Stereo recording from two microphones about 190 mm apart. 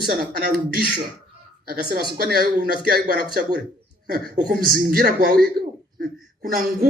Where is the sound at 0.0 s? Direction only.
55° right (ahead or behind).